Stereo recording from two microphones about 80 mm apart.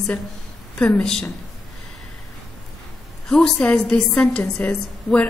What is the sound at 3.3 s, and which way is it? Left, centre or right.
A woman's voice, centre.